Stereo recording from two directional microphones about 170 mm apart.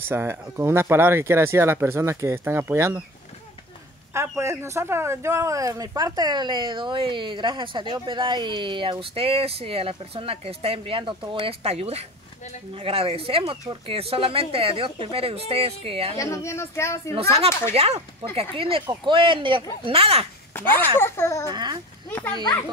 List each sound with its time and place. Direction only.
0.0 s speech: 15° right (ahead or behind)
4.1 s speech: 15° right (ahead or behind); by 16.2 s 35° right (ahead or behind)
16.2 s a child's voice: 15° left (ahead or behind)
17.1 s speech: 35° right (ahead or behind)
20.5 s a child's voice: 15° left (ahead or behind)